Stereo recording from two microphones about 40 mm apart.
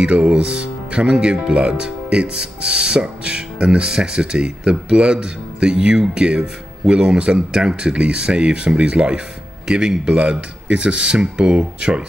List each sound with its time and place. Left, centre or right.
0.0 s speech: right